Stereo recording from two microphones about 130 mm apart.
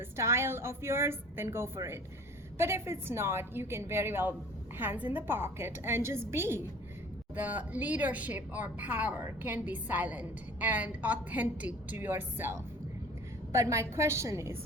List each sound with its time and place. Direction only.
0.2 s a woman's voice: 20° right (ahead or behind)